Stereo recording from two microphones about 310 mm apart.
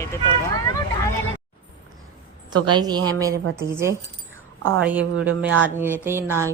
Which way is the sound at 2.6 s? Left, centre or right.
Centre.